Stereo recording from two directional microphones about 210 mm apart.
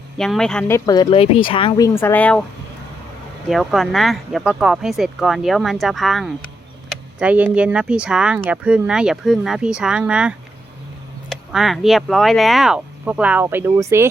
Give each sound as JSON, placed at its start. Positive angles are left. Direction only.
{"t": 0.2, "sound": "speech", "side_deg": 0}
{"t": 0.9, "sound": "speech", "side_deg": 25}
{"t": 3.5, "sound": "speech", "side_deg": 0}